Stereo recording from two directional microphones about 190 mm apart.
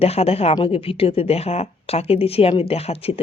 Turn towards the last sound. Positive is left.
turn(degrees=30)  # may be behind; listen again after turning